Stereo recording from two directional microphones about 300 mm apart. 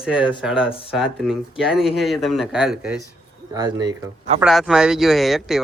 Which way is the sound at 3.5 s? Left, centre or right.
Centre.